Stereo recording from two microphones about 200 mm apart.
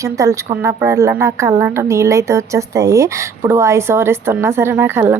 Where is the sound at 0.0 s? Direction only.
15° right (ahead or behind).